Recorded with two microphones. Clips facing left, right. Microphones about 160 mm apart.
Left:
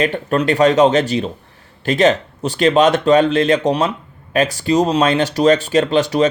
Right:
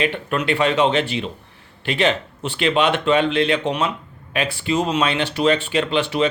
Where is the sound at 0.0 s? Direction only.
40° left (ahead or behind).